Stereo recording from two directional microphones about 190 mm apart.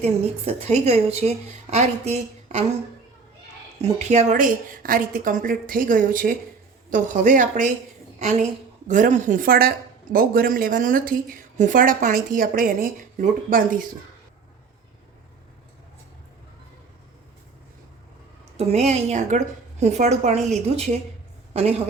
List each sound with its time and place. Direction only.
0.0 s a woman's voice: 35° right (ahead or behind)
3.8 s a woman's voice: 35° right (ahead or behind)
18.5 s a woman's voice: 35° right (ahead or behind)